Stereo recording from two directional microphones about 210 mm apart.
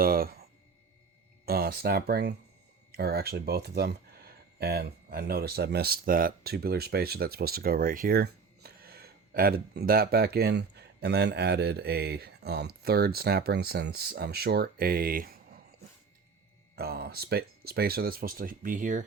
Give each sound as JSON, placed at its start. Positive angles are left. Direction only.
{"t": 0.0, "sound": "speech", "side_deg": -45}
{"t": 1.5, "sound": "speech", "side_deg": -45}
{"t": 16.7, "sound": "speech", "side_deg": -50}